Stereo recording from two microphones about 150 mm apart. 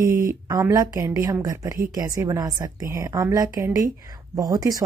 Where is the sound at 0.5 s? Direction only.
25° right (ahead or behind).